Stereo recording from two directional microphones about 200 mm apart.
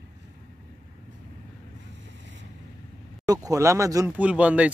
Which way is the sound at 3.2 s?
20° right (ahead or behind).